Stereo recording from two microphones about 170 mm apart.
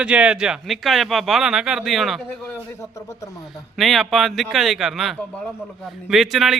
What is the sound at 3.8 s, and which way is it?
A man's voice, centre (ahead or behind).